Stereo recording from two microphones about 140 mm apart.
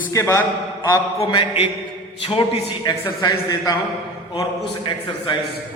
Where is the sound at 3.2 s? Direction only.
25° left (ahead or behind).